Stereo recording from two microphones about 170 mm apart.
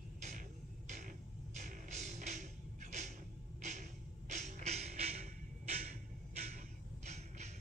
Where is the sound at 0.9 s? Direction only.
50° right (ahead or behind).